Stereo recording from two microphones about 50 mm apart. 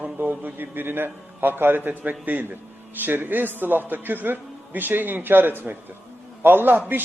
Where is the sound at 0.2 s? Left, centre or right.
Right.